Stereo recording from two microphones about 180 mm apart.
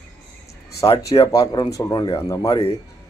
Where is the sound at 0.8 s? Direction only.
35° left (ahead or behind).